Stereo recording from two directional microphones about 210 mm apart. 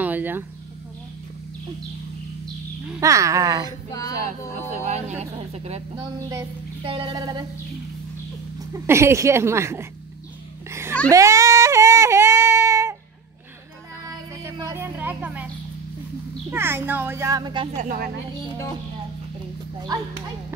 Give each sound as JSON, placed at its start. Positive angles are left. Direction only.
{"t": 0.0, "sound": "a sound", "side_deg": -10}
{"t": 3.0, "sound": "a child's voice", "side_deg": -15}
{"t": 4.8, "sound": "speech", "side_deg": -35}
{"t": 6.1, "sound": "child singing", "side_deg": -20}
{"t": 8.8, "sound": "a child's voice", "side_deg": -15}
{"t": 10.7, "sound": "a sound", "side_deg": -10}
{"t": 14.4, "sound": "speech", "side_deg": -15}
{"t": 16.4, "sound": "a child's voice", "side_deg": -10}
{"t": 17.7, "sound": "speech", "side_deg": -40}